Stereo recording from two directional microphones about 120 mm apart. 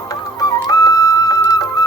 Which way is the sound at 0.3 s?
30° left (ahead or behind).